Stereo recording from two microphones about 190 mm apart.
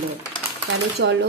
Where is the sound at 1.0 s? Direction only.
65° right (ahead or behind).